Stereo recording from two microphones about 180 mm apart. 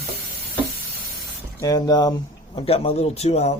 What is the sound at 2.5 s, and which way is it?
A man's voice, 35° left (ahead or behind).